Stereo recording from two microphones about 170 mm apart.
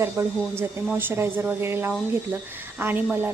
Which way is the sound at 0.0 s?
15° right (ahead or behind).